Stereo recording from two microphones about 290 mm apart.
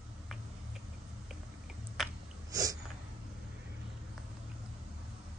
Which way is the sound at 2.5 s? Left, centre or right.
Centre.